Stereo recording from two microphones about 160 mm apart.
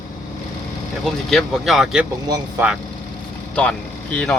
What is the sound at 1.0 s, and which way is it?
Speech, centre (ahead or behind).